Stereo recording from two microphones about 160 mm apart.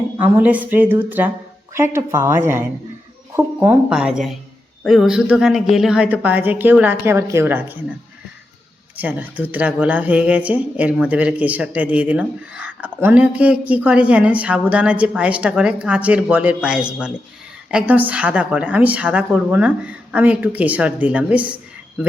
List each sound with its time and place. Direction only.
0.2 s speech: 10° right (ahead or behind)
9.0 s speech: 10° right (ahead or behind)